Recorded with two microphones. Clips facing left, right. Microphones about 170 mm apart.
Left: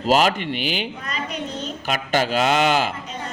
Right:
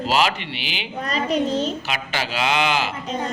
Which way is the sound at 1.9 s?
45° left (ahead or behind).